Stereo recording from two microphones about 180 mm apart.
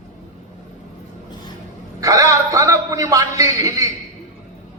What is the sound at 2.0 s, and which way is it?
A man's voice, 20° right (ahead or behind).